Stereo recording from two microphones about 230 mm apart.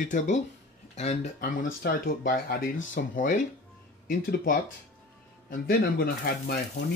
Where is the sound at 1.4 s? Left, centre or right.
Left.